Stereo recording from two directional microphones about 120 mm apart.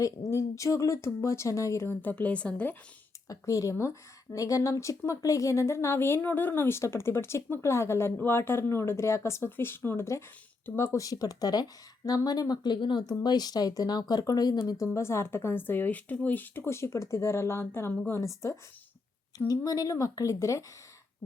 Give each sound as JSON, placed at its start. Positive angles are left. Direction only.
{"t": 0.0, "sound": "speech", "side_deg": 25}
{"t": 3.2, "sound": "speech", "side_deg": 25}